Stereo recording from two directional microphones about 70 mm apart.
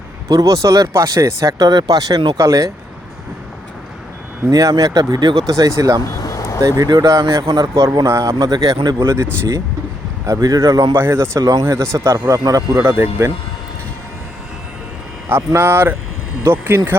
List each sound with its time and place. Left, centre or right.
0.3 s speech: right
2.4 s speech: right
4.7 s speech: right
6.2 s a sound: left
6.6 s speech: right
7.4 s speech: right
7.7 s speech: right
9.0 s speech: right
10.2 s speech: right
10.9 s speech: right
12.1 s speech: right
12.7 s speech: right
15.3 s speech: right